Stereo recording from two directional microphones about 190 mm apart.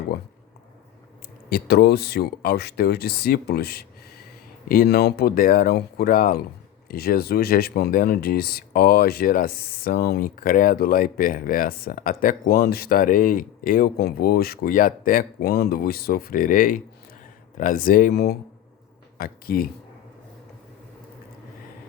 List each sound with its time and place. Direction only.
1.5 s speech: 55° left (ahead or behind)